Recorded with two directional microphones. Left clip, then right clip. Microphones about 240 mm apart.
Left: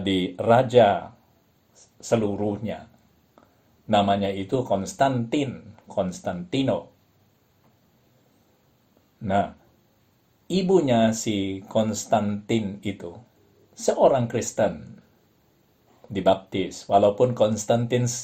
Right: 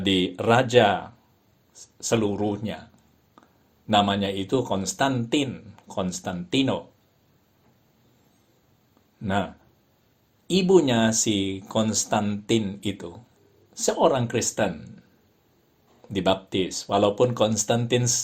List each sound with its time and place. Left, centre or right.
0.0 s speech: right
2.0 s speech: right
3.8 s speech: right
9.2 s speech: right
16.1 s speech: right